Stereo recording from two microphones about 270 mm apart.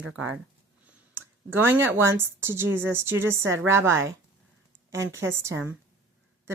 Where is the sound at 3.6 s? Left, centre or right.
Centre.